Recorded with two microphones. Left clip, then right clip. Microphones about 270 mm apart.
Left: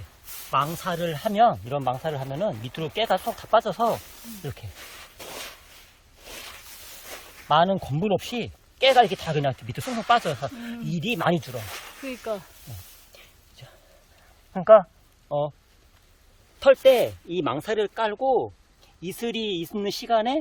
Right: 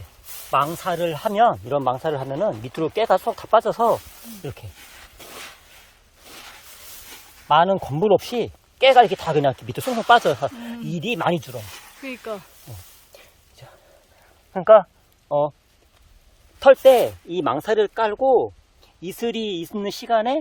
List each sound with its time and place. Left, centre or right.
0.5 s speech: centre
4.9 s a sound: centre
7.4 s speech: centre
11.6 s snake: centre
12.0 s speech: centre
13.1 s a sound: centre
14.5 s speech: right
16.6 s speech: centre
18.3 s speech: right
19.0 s speech: centre